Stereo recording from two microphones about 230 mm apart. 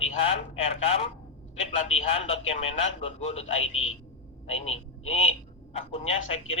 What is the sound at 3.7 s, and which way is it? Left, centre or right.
Speech, left.